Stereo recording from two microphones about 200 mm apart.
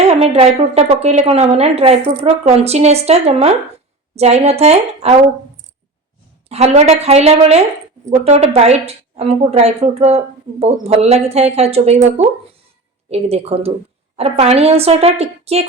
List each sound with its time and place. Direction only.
0.1 s a woman's voice: 30° right (ahead or behind)
6.5 s a woman's voice: 30° right (ahead or behind)